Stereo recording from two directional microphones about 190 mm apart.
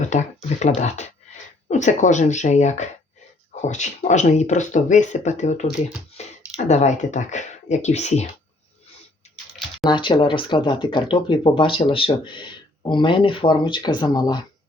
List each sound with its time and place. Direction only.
0.8 s speech: 35° left (ahead or behind)
6.2 s a sound: 35° left (ahead or behind)
6.7 s speech: 35° left (ahead or behind)
9.8 s speech: 25° left (ahead or behind)